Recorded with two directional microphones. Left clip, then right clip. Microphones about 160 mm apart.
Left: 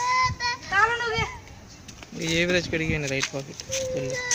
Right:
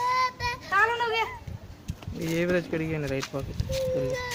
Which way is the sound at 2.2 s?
10° left (ahead or behind).